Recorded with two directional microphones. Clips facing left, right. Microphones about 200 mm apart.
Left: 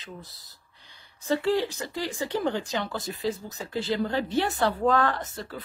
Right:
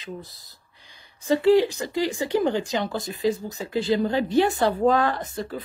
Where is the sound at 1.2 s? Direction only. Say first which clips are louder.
Right 7 dB; 15° right (ahead or behind).